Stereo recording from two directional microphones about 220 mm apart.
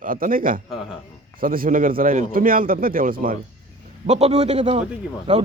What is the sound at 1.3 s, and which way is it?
A man's voice, 40° right (ahead or behind).